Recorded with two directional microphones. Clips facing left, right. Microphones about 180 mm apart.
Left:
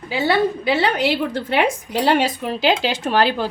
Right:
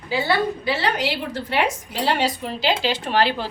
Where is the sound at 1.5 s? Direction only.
55° left (ahead or behind).